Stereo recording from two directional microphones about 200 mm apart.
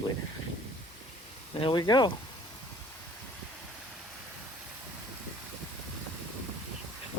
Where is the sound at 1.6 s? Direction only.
20° left (ahead or behind).